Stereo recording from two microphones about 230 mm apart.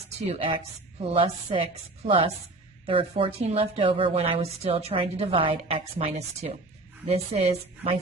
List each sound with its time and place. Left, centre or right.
0.3 s a woman's voice: right